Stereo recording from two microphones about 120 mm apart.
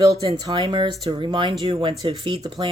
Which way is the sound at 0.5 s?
45° right (ahead or behind).